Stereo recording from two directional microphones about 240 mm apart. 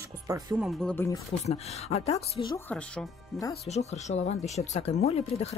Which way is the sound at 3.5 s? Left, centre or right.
Left.